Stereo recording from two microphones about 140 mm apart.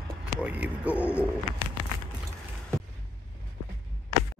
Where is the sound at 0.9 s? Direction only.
15° left (ahead or behind).